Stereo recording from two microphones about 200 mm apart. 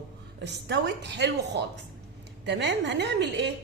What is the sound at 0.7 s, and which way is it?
A woman's voice, 60° right (ahead or behind).